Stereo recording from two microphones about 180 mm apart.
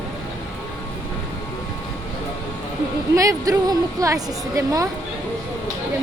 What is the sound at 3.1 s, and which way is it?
A woman's voice, 20° right (ahead or behind).